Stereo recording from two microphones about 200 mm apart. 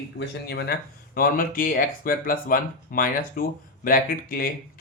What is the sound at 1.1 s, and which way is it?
Speech, 45° left (ahead or behind).